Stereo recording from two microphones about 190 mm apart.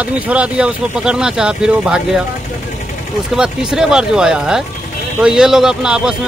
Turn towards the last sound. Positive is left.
turn(degrees=-5)  # may be behind; listen again after turning